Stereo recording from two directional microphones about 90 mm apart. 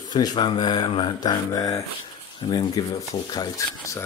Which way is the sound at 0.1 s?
55° left (ahead or behind).